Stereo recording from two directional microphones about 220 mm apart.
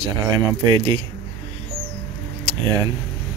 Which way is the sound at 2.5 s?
20° right (ahead or behind).